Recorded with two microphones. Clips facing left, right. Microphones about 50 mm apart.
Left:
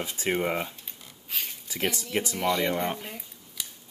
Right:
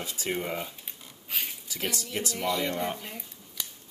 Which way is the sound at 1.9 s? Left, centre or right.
Left.